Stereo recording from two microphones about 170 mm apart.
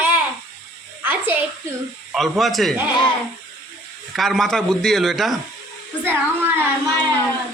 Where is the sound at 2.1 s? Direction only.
Centre (ahead or behind).